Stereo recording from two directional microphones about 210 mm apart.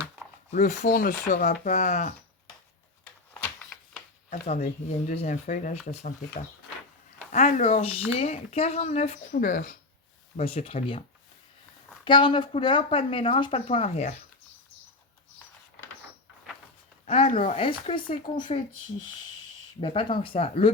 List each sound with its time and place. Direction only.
0.5 s speech: 35° left (ahead or behind)
3.4 s a sound: centre (ahead or behind)
4.3 s speech: 30° left (ahead or behind)
7.3 s speech: 35° left (ahead or behind)
10.3 s speech: 25° left (ahead or behind)
12.0 s speech: 25° left (ahead or behind)
17.1 s speech: 25° left (ahead or behind)
19.8 s speech: 25° left (ahead or behind)